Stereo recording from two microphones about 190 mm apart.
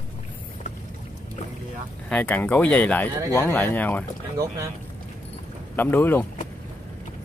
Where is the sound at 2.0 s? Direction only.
5° left (ahead or behind).